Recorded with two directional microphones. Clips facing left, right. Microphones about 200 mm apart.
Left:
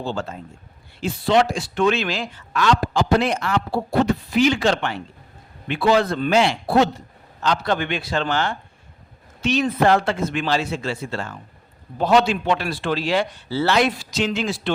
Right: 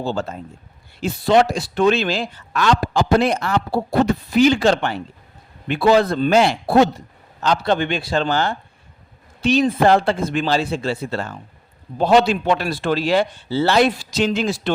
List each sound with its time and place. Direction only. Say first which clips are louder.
0.0 s a man's voice: right 3 dB; 40° right (ahead or behind)
7.6 s speech: right 3 dB; 25° right (ahead or behind)
13.5 s speech: right 3 dB; 30° right (ahead or behind)